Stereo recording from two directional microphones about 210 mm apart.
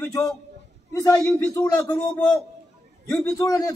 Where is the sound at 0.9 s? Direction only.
15° left (ahead or behind).